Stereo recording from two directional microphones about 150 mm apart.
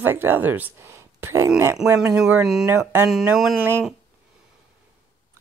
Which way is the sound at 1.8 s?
5° right (ahead or behind).